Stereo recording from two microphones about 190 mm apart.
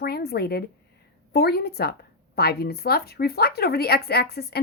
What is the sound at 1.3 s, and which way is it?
A woman's voice, 55° left (ahead or behind).